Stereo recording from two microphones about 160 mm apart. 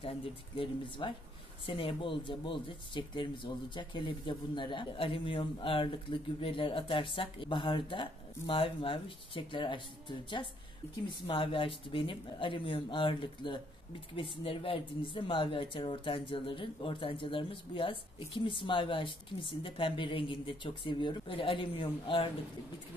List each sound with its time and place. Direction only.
0.0 s speech: 35° left (ahead or behind)